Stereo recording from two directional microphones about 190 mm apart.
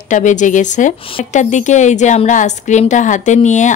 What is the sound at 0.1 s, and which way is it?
Speech, 40° left (ahead or behind).